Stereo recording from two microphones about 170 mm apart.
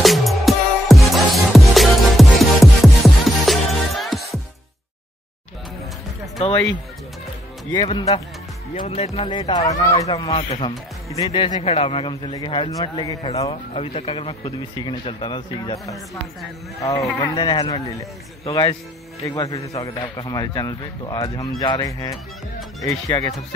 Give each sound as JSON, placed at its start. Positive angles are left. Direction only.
{"t": 0.0, "sound": "music", "side_deg": 0}
{"t": 7.7, "sound": "a man's voice", "side_deg": 25}
{"t": 8.7, "sound": "a man's voice", "side_deg": 40}
{"t": 10.3, "sound": "a man's voice", "side_deg": 35}
{"t": 13.5, "sound": "a man's voice", "side_deg": 35}
{"t": 22.1, "sound": "speech", "side_deg": 0}
{"t": 22.8, "sound": "a man's voice", "side_deg": 20}